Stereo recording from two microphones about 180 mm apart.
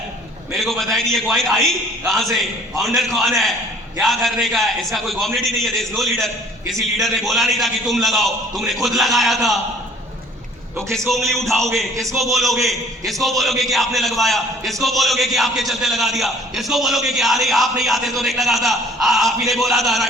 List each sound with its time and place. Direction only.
0.5 s a man's voice: centre (ahead or behind)
10.9 s a man's voice: centre (ahead or behind)
11.9 s a man's voice: 15° right (ahead or behind)
12.3 s a man's voice: centre (ahead or behind)